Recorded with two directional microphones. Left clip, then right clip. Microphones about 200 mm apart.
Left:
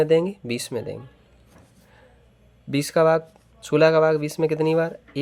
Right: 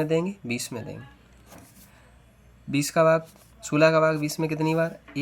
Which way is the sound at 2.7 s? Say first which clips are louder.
Left 2 dB; 30° left (ahead or behind).